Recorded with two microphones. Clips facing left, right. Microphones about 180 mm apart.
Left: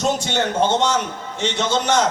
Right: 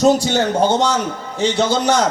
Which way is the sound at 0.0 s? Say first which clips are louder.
Right 7 dB; 35° right (ahead or behind).